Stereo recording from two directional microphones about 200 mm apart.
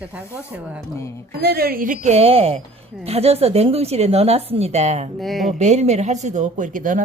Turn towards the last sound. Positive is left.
turn(degrees=-40)  # may be behind; listen again after turning